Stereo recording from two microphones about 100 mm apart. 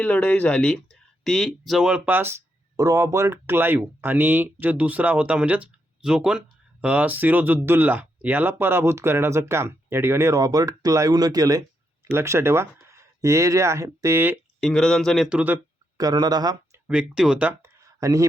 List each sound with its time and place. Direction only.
0.0 s speech: 10° left (ahead or behind); by 2.0 s 5° right (ahead or behind)
2.0 s speech: 20° right (ahead or behind); by 11.6 s 40° right (ahead or behind)
12.0 s speech: 25° right (ahead or behind)
14.6 s speech: 5° left (ahead or behind)
15.4 s speech: 20° right (ahead or behind)
16.0 s speech: 40° right (ahead or behind)
16.7 s speech: 15° right (ahead or behind)
17.6 s a sound: 35° right (ahead or behind)